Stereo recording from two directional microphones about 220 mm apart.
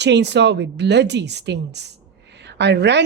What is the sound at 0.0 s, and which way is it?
A woman's voice, 50° right (ahead or behind).